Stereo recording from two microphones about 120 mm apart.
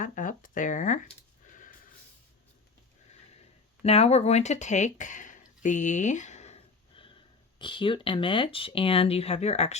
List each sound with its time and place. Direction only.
0.0 s a sound: 90° left
3.8 s speech: 60° left (ahead or behind)
7.6 s speech: 45° left (ahead or behind); by 9.7 s 65° left (ahead or behind)